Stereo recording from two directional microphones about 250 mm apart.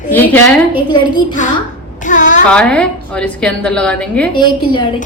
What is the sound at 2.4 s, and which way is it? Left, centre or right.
A woman's voice, centre.